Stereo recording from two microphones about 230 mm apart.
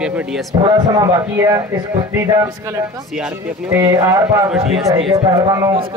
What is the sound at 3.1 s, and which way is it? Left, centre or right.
Speech, centre.